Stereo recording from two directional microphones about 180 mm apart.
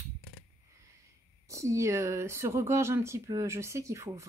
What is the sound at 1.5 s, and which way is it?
Speech, 15° right (ahead or behind).